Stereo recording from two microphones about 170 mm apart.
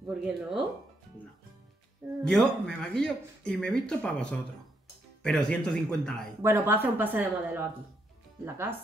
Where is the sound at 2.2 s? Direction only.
5° left (ahead or behind).